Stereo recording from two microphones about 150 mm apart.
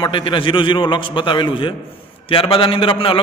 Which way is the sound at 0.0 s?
35° left (ahead or behind).